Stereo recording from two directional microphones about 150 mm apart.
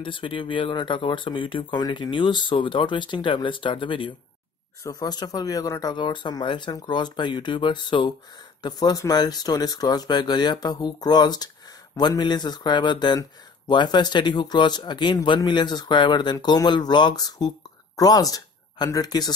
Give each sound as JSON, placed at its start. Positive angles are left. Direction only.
{"t": 0.0, "sound": "speech", "side_deg": 35}